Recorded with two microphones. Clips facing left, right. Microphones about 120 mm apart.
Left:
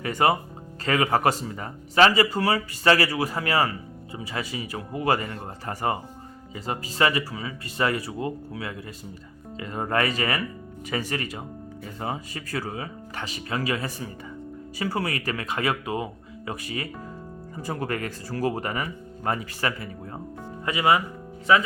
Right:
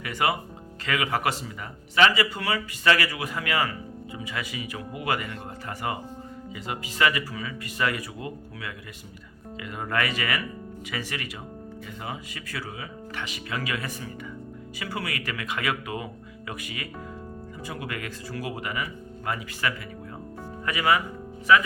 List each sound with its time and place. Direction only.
0.0 s speech: 35° left (ahead or behind)
20.7 s speech: 25° left (ahead or behind)